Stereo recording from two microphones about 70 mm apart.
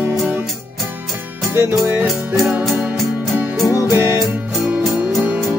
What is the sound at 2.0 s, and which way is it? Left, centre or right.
Music, centre.